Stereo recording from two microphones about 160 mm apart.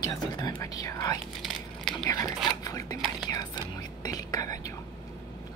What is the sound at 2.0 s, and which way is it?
Speech, 25° left (ahead or behind).